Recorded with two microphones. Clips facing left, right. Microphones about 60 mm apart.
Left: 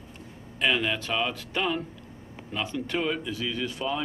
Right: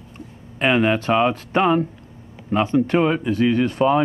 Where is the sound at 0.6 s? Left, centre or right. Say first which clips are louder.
Right 8 dB; right.